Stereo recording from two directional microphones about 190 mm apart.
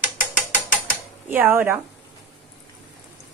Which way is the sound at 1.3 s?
10° right (ahead or behind).